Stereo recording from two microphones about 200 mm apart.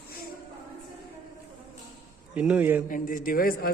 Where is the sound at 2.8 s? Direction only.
45° left (ahead or behind).